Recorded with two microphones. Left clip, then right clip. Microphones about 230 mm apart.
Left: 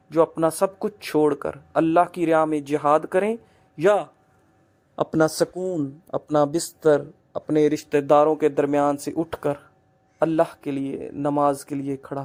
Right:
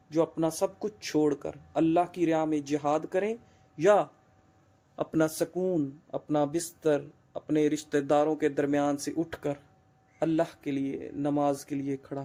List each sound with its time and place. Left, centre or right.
0.1 s speech: centre
4.9 s speech: left